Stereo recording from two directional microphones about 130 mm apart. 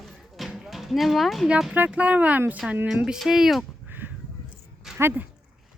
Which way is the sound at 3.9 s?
15° right (ahead or behind).